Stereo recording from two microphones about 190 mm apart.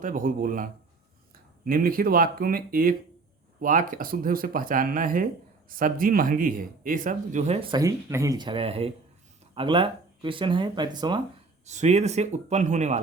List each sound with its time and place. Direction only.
0.0 s speech: 45° right (ahead or behind); by 11.2 s 25° right (ahead or behind)
11.6 s speech: 35° right (ahead or behind)